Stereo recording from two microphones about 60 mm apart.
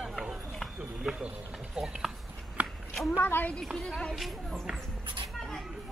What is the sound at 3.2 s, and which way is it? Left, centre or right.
Speech, left.